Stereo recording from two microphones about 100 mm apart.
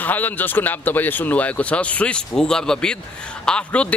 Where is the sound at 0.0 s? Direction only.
15° left (ahead or behind).